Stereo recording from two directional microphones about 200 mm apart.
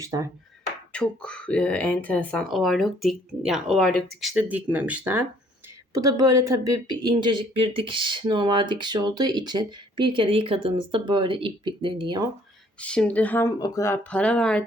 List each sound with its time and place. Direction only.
0.0 s speech: 15° right (ahead or behind)
0.9 s speech: 5° left (ahead or behind); by 12.3 s 20° right (ahead or behind)
12.8 s speech: 5° left (ahead or behind)